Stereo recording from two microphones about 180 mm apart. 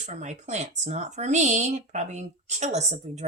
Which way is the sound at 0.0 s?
40° right (ahead or behind).